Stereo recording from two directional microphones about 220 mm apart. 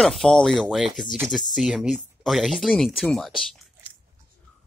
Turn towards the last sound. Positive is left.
turn(degrees=0)  # may be behind; listen again after turning